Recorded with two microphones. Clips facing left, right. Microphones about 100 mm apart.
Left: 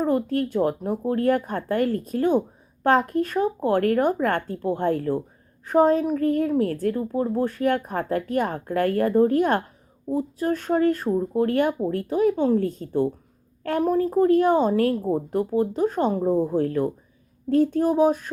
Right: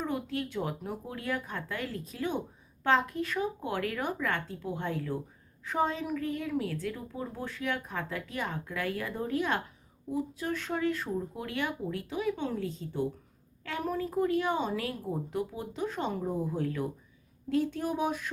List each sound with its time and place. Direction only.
0.0 s a woman's voice: 45° left (ahead or behind)